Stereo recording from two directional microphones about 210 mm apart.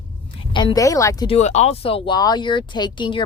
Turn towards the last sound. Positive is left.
turn(degrees=20)  # may be behind; listen again after turning